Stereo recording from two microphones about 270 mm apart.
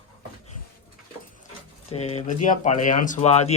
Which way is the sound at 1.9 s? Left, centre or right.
Left.